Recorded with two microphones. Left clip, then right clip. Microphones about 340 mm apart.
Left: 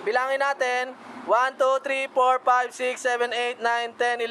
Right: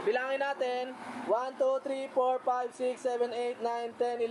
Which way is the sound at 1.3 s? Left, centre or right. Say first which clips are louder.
Left 9 dB; left.